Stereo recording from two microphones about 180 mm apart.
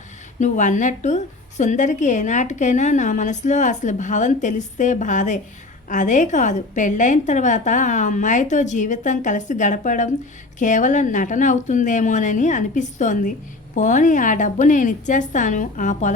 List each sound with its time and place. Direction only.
0.3 s a woman's voice: 45° left (ahead or behind)